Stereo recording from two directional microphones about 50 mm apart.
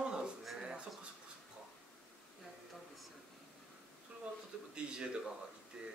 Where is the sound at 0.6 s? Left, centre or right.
Centre.